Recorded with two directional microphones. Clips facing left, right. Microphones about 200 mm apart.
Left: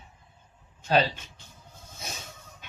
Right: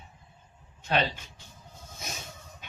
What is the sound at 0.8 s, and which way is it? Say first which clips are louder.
Speech: left 4 dB; 35° left (ahead or behind).